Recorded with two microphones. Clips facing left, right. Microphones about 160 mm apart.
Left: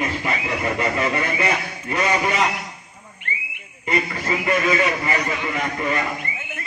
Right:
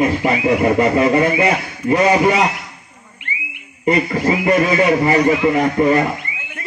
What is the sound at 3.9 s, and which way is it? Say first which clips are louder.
Speech: right 8 dB; 35° right (ahead or behind).